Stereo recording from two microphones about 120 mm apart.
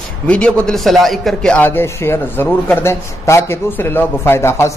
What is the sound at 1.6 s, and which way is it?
Speech, 20° left (ahead or behind).